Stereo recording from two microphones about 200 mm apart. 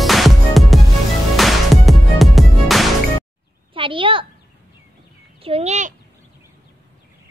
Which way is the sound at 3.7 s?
25° right (ahead or behind).